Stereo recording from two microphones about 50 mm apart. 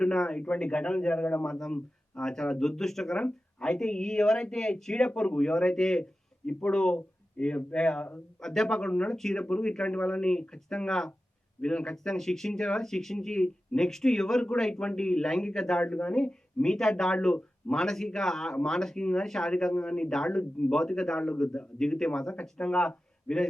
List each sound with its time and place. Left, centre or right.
0.0 s a man's voice: centre
1.5 s speech: centre
15.8 s speech: left